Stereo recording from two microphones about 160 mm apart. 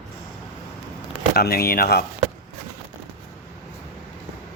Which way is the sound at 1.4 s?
70° left (ahead or behind).